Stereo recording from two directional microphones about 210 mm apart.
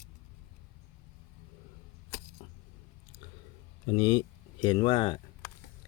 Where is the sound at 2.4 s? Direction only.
30° left (ahead or behind).